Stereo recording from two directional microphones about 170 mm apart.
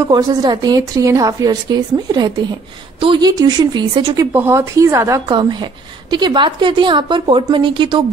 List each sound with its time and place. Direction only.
0.1 s a woman's voice: 25° right (ahead or behind)
4.3 s a woman's voice: 15° right (ahead or behind)